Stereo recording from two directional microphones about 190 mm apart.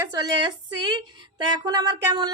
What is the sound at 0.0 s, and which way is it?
Speech, 20° right (ahead or behind).